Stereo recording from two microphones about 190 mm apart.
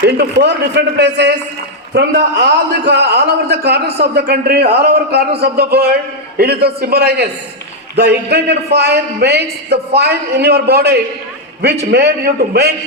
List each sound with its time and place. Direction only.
0.0 s a man's voice: 60° right (ahead or behind)